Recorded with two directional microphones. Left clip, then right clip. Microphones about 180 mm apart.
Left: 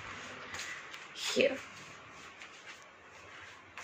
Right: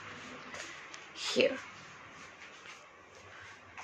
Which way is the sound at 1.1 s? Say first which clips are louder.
Even; 10° right (ahead or behind).